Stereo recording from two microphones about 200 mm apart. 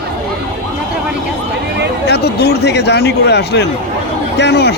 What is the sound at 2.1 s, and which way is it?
A man's voice, 55° left (ahead or behind).